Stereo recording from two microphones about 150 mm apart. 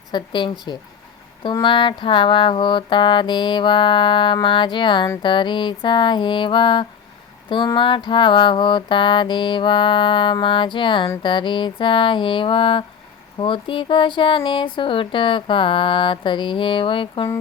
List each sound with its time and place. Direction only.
0.1 s mantra: 30° left (ahead or behind)